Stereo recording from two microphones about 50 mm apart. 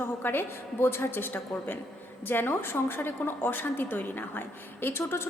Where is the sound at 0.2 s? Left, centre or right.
Left.